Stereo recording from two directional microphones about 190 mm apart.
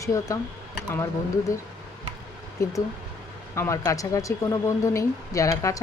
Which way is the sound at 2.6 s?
20° left (ahead or behind).